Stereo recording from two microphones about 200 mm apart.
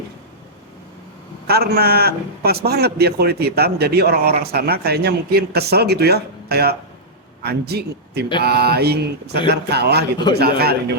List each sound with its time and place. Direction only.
1.5 s a man's voice: 50° right (ahead or behind)